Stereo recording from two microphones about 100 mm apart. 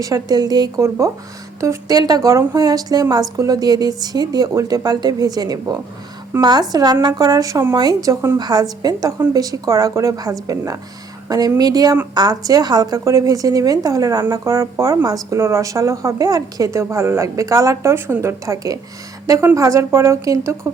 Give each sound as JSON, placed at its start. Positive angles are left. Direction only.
{"t": 0.0, "sound": "a woman's voice", "side_deg": -40}
{"t": 0.8, "sound": "a woman's voice", "side_deg": -30}
{"t": 8.4, "sound": "a woman's voice", "side_deg": -45}